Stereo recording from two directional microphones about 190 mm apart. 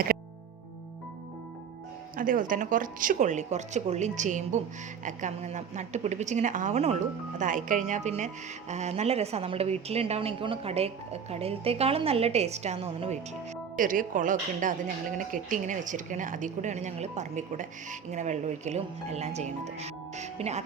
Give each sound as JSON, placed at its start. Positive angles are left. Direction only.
{"t": 2.1, "sound": "a woman's voice", "side_deg": -45}
{"t": 13.7, "sound": "a woman's voice", "side_deg": -45}